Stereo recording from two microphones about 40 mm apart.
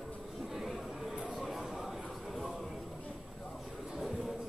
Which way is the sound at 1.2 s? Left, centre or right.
Centre.